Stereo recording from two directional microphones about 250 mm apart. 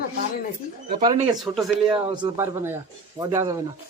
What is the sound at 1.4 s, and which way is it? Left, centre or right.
Speech, centre.